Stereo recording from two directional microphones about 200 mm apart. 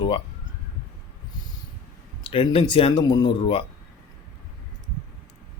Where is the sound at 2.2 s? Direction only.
25° left (ahead or behind).